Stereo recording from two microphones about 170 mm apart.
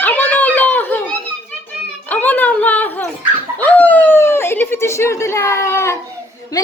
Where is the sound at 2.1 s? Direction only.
10° left (ahead or behind).